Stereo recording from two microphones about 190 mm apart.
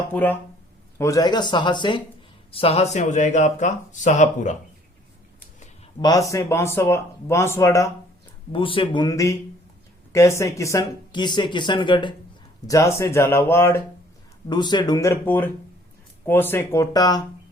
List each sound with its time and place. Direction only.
0.1 s speech: 10° left (ahead or behind); by 4.5 s 40° left (ahead or behind)
6.0 s speech: 20° left (ahead or behind)
8.5 s speech: 25° left (ahead or behind)
14.5 s speech: 25° left (ahead or behind)